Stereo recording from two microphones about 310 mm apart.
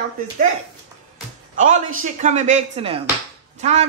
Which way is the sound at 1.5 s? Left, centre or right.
Right.